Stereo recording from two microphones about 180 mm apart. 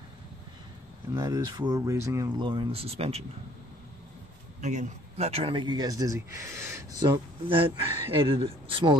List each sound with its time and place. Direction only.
1.1 s a man's voice: 20° right (ahead or behind); by 3.3 s 35° right (ahead or behind)
4.6 s a man's voice: 40° right (ahead or behind); by 6.8 s 15° right (ahead or behind)
7.0 s a man's voice: 25° right (ahead or behind)